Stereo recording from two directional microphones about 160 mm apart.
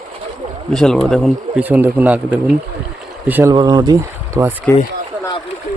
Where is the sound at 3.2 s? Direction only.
10° right (ahead or behind).